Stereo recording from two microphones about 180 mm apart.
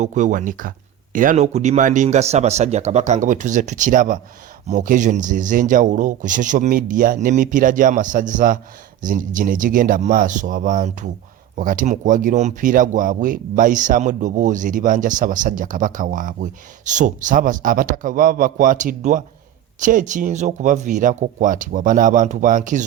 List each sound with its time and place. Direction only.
0.0 s speech: 45° right (ahead or behind)